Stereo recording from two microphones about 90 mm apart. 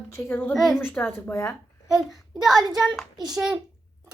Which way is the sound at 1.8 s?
5° right (ahead or behind).